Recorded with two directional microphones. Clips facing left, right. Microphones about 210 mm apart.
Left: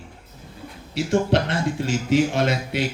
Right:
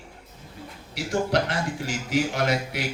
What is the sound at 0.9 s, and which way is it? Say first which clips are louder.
A man's voice: left 4 dB; 25° left (ahead or behind).